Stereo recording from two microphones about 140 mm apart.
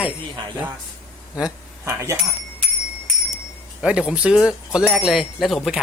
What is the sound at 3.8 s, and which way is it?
Speech, 5° right (ahead or behind).